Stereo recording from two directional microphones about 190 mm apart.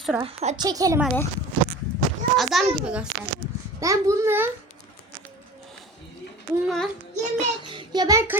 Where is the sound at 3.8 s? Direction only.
15° right (ahead or behind).